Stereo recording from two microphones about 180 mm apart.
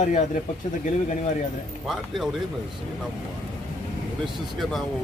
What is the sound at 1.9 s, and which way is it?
Speech, centre (ahead or behind).